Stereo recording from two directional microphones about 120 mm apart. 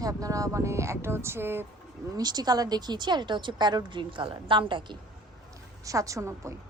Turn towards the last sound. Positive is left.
turn(degrees=-25)  # may be behind; listen again after turning